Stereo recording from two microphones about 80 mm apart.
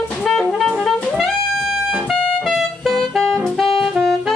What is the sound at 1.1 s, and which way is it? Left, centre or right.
Music, centre.